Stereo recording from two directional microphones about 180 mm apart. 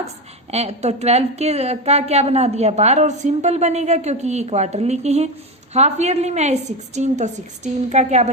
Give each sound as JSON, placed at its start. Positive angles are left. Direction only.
{"t": 0.5, "sound": "a woman's voice", "side_deg": -35}